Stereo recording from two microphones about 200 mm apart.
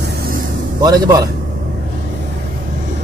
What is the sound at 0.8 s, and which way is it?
Speech, 20° right (ahead or behind).